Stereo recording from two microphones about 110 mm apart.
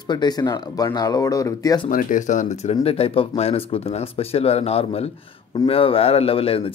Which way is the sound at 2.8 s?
65° left (ahead or behind).